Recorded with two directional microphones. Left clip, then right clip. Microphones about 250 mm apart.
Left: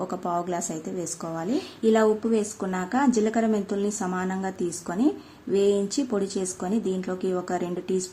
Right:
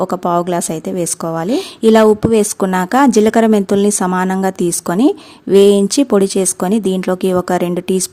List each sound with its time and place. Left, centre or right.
0.0 s a woman's voice: right